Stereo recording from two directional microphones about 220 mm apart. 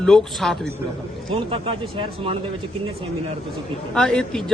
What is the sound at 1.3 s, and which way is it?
Speech, 25° right (ahead or behind).